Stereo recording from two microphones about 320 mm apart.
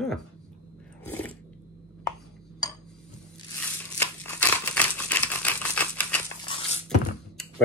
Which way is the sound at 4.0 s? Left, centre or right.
Centre.